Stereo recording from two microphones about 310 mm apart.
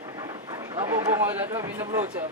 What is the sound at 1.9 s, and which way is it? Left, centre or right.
Speech, centre.